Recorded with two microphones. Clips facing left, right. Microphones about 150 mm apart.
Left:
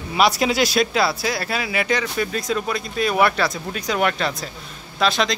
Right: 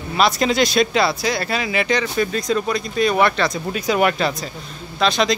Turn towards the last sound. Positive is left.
turn(degrees=0)  # may be behind; listen again after turning